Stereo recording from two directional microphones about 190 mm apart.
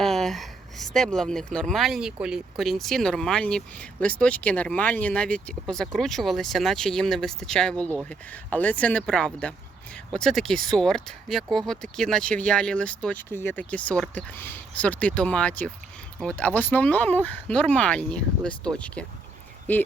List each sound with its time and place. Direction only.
0.0 s speech: centre (ahead or behind)